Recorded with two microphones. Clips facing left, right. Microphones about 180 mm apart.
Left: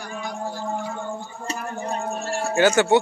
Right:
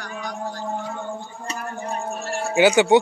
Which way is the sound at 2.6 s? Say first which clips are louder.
Right 2 dB; 15° right (ahead or behind).